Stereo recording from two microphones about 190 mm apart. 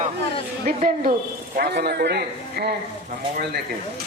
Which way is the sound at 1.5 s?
60° right (ahead or behind).